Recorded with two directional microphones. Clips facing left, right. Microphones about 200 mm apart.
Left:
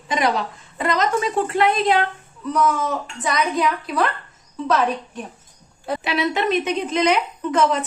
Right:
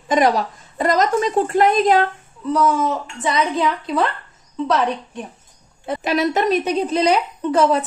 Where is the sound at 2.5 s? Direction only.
25° right (ahead or behind).